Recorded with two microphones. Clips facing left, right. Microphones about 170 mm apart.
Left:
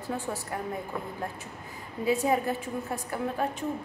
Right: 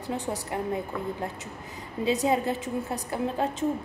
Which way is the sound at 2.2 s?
20° right (ahead or behind).